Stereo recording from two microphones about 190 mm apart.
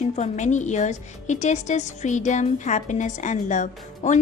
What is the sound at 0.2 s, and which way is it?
A woman's voice, 40° left (ahead or behind).